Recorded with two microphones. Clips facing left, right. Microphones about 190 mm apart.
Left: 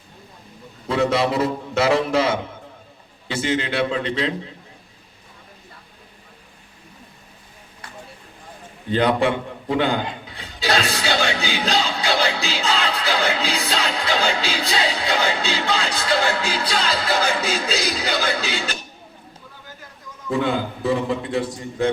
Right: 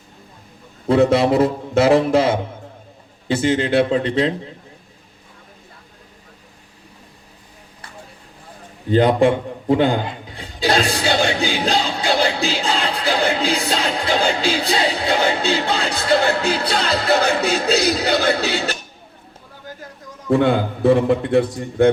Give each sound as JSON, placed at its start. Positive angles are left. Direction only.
{"t": 0.9, "sound": "a man's voice", "side_deg": -55}
{"t": 8.9, "sound": "a man's voice", "side_deg": -45}
{"t": 11.4, "sound": "music", "side_deg": -45}
{"t": 20.3, "sound": "a man's voice", "side_deg": -60}